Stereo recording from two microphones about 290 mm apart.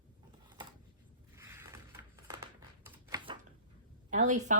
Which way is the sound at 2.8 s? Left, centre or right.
Centre.